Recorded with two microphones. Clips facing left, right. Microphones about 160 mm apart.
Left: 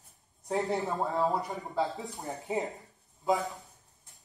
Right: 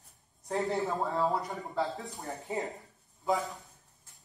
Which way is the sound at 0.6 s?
Centre (ahead or behind).